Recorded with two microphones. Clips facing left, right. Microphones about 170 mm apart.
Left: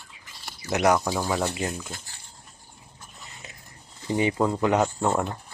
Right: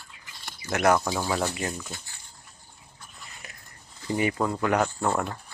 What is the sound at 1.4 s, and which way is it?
Speech, 20° left (ahead or behind).